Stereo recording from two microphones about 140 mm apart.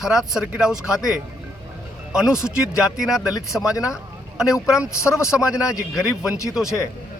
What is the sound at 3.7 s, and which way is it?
Speech, 25° left (ahead or behind).